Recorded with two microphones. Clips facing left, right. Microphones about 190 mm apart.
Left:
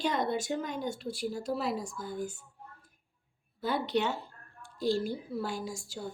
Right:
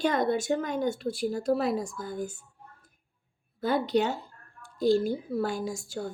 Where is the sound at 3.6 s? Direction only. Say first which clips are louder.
Right 4 dB; 45° right (ahead or behind).